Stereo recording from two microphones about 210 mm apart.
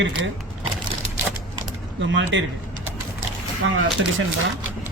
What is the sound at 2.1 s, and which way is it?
Speech, 60° right (ahead or behind).